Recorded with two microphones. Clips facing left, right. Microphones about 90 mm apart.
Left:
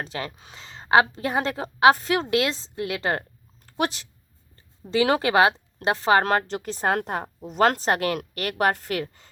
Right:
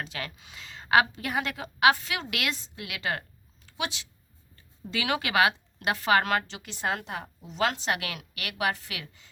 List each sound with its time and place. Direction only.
0.0 s a woman's voice: 35° left (ahead or behind)